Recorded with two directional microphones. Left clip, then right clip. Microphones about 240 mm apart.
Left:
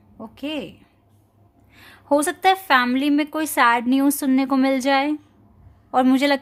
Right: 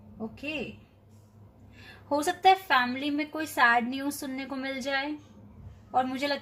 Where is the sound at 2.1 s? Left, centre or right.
Left.